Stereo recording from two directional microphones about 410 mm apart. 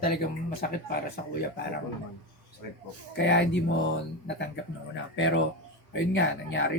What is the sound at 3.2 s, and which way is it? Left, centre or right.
Speech, left.